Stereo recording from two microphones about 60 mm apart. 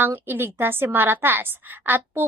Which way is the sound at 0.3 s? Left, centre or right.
Right.